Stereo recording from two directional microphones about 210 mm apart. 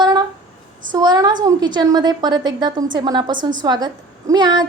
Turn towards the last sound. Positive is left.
turn(degrees=-20)  # may be behind; listen again after turning